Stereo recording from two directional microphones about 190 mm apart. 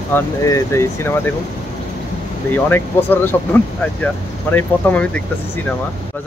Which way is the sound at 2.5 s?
10° left (ahead or behind).